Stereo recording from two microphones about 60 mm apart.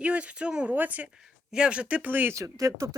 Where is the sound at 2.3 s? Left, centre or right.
Right.